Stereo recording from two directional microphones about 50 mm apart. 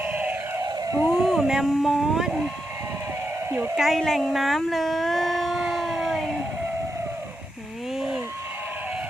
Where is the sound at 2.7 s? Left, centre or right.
Right.